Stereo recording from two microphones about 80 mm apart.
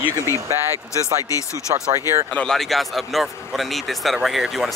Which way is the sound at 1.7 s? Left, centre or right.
Right.